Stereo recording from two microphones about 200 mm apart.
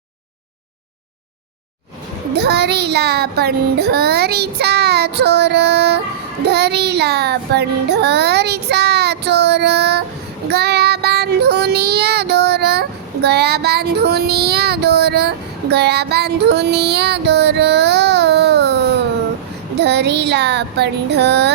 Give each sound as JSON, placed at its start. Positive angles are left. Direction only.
{"t": 2.3, "sound": "child singing", "side_deg": -55}
{"t": 15.7, "sound": "music", "side_deg": -55}
{"t": 19.7, "sound": "a sound", "side_deg": -55}